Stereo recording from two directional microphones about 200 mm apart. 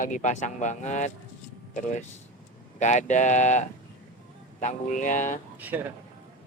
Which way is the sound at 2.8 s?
40° left (ahead or behind).